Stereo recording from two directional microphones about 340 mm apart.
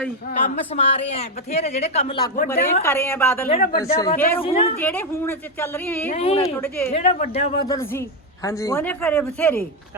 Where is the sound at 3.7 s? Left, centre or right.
Centre.